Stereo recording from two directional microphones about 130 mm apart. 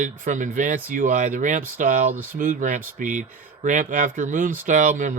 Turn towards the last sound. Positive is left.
turn(degrees=-75)  # may be behind; listen again after turning